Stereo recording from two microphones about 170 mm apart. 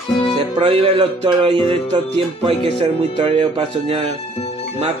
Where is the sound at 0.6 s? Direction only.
35° right (ahead or behind).